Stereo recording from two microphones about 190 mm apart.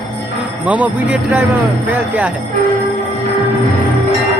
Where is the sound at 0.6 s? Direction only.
5° right (ahead or behind).